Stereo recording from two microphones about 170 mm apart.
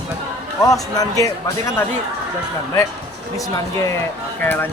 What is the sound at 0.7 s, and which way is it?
Speech, 20° left (ahead or behind).